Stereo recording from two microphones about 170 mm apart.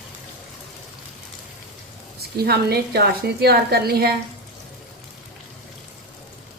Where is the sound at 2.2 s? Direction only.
70° right (ahead or behind).